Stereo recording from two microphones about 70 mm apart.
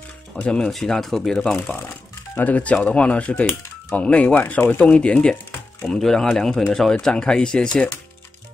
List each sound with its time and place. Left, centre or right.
0.4 s speech: centre
2.3 s speech: left